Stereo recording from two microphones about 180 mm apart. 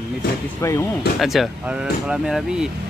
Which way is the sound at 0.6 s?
15° left (ahead or behind).